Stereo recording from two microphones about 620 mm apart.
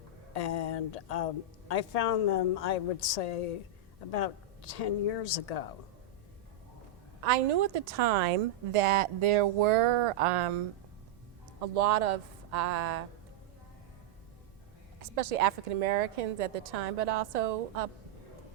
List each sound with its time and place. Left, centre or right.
0.3 s a woman's voice: left
4.7 s a woman's voice: left
7.2 s a woman's voice: right
8.7 s speech: right
11.6 s speech: right
15.1 s a woman's voice: right